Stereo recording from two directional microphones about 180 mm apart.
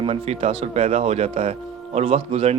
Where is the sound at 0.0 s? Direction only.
35° right (ahead or behind).